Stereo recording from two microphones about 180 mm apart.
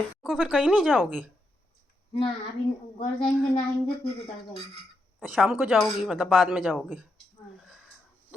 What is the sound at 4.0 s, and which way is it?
Speech, 30° left (ahead or behind).